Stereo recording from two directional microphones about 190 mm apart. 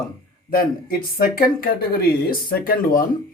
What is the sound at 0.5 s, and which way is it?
Speech, 50° left (ahead or behind).